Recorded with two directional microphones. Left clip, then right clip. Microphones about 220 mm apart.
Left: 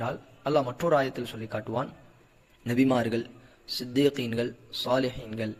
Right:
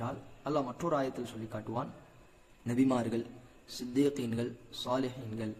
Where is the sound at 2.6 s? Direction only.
25° left (ahead or behind).